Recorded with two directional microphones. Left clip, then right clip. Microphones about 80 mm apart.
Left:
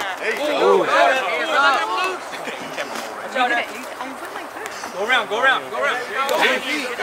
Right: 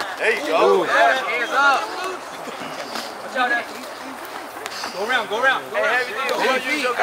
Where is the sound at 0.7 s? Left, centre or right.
Centre.